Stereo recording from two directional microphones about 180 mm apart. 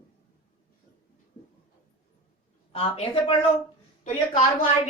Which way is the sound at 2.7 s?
30° left (ahead or behind).